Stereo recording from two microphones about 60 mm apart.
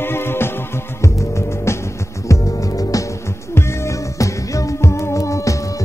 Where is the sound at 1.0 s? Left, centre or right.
Left.